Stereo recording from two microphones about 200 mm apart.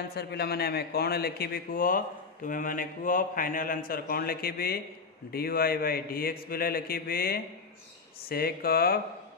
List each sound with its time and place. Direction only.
0.1 s a man's voice: 55° left (ahead or behind)